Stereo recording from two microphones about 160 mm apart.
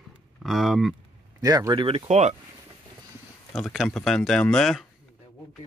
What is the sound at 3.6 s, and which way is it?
Speech, centre (ahead or behind).